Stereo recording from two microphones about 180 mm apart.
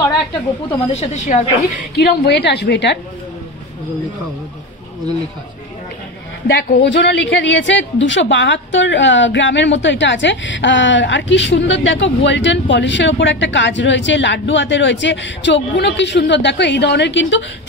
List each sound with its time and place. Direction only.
0.9 s speech: 40° left (ahead or behind)
2.0 s a woman's voice: 65° left (ahead or behind)
6.4 s a woman's voice: 75° left (ahead or behind); by 17.5 s 90° left